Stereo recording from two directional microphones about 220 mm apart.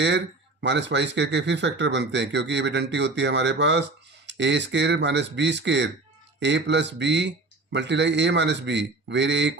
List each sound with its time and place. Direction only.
0.6 s speech: 55° right (ahead or behind)